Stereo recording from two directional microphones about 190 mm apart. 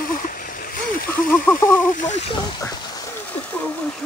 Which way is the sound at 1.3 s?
10° left (ahead or behind).